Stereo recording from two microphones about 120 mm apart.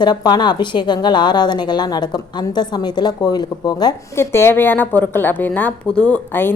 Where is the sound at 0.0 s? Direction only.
35° left (ahead or behind).